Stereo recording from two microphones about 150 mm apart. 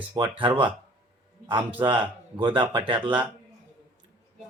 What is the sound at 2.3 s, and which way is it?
Speech, 35° right (ahead or behind).